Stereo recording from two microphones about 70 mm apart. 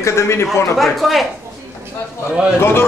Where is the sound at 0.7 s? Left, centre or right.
Centre.